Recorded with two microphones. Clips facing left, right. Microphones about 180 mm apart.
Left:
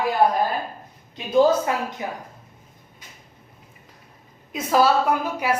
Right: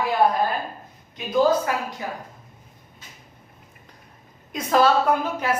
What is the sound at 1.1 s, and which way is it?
Speech, 25° left (ahead or behind).